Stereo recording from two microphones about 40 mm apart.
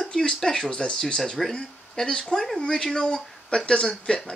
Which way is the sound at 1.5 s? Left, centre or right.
Centre.